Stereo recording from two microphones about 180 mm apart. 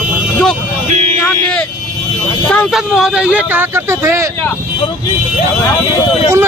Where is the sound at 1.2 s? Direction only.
5° left (ahead or behind).